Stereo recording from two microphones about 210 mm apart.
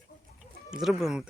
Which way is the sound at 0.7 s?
Centre (ahead or behind).